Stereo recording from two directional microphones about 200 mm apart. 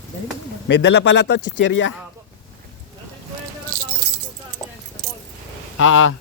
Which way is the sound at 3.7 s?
40° right (ahead or behind).